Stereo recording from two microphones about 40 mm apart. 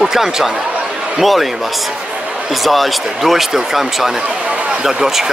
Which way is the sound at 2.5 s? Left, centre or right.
Centre.